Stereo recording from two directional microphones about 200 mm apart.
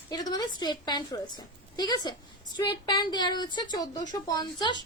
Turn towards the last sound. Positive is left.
turn(degrees=20)  # may be behind; listen again after turning